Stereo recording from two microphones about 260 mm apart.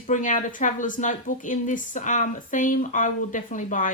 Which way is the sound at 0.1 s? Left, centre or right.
Left.